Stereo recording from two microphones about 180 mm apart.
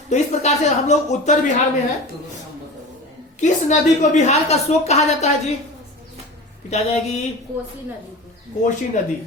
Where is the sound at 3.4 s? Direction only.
40° left (ahead or behind).